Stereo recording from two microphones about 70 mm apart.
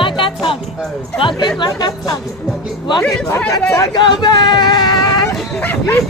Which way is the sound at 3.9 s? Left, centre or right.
Left.